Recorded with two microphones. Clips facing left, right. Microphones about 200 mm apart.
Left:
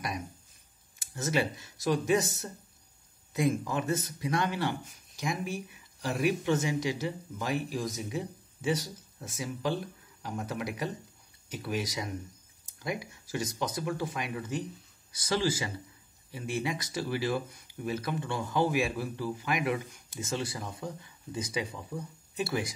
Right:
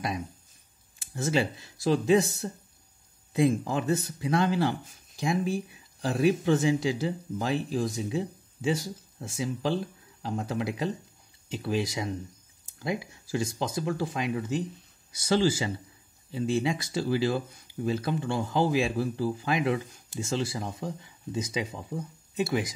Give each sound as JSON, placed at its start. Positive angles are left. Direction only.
{"t": 1.1, "sound": "speech", "side_deg": -30}